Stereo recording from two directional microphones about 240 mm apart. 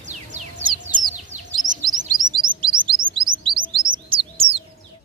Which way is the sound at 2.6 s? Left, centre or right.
Right.